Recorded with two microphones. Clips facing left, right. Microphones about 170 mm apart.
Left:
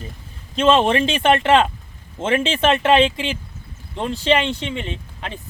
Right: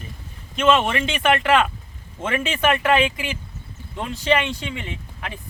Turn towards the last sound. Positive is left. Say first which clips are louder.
# left 3 dB
turn(degrees=25)  # may be behind; listen again after turning